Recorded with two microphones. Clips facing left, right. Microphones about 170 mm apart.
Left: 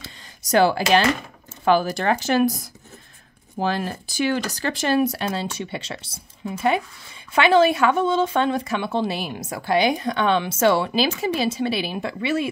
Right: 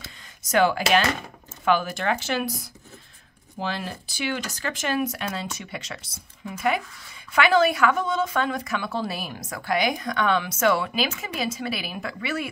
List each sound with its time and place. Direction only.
0.5 s speech: 35° left (ahead or behind)